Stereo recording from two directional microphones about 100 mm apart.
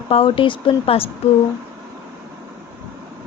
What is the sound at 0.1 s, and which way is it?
Speech, 65° left (ahead or behind).